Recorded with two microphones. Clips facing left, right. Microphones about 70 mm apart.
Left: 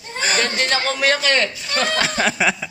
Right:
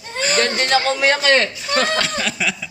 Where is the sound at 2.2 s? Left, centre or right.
Left.